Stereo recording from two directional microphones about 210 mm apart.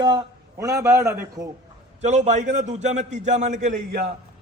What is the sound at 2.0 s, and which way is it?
A man's voice, 35° right (ahead or behind).